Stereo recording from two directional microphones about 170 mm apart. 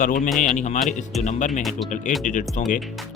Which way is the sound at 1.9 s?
45° left (ahead or behind).